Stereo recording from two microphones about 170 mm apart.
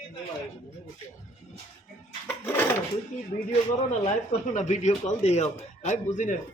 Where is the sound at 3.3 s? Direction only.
45° left (ahead or behind).